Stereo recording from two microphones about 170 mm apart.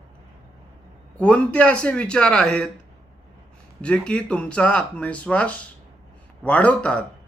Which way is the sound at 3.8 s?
5° left (ahead or behind).